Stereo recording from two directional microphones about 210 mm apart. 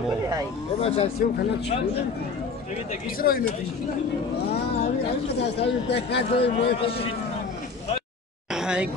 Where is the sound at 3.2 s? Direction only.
45° left (ahead or behind).